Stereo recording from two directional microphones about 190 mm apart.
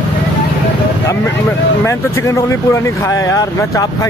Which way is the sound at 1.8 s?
15° left (ahead or behind).